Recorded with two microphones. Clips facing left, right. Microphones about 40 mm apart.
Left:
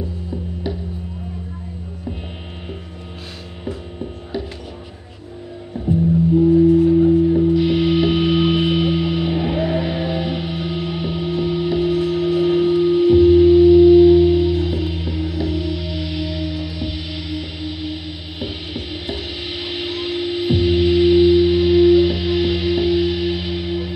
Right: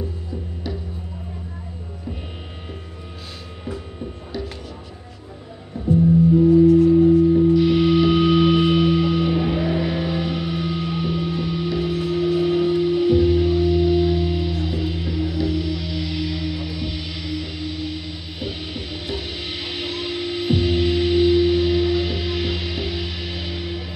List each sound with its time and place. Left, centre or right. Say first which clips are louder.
0.7 s music: left 4 dB; left
6.5 s singing bowl: even; left
7.1 s music: even; centre